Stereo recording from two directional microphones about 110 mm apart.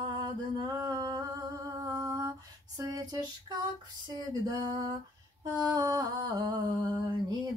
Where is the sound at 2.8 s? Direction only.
35° right (ahead or behind).